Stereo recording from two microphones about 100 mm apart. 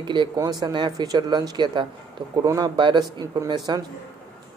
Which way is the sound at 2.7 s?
50° right (ahead or behind).